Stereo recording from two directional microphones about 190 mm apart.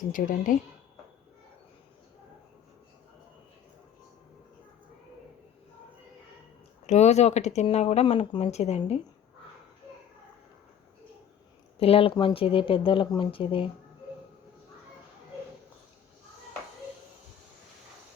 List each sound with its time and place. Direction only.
0.1 s speech: 45° left (ahead or behind)
6.8 s speech: 35° left (ahead or behind)
11.8 s speech: 30° left (ahead or behind)